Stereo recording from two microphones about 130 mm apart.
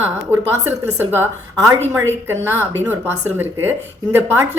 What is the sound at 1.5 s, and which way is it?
A woman's voice, 30° right (ahead or behind).